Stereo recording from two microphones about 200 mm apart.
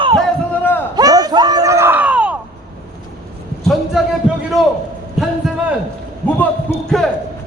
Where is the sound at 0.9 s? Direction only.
20° right (ahead or behind).